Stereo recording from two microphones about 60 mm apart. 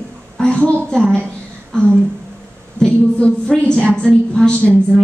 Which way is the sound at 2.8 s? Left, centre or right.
Centre.